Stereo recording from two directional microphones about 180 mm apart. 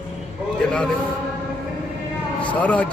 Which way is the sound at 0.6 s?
5° left (ahead or behind).